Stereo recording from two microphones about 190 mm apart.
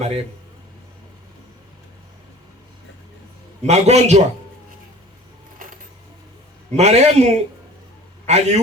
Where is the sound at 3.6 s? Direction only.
35° right (ahead or behind).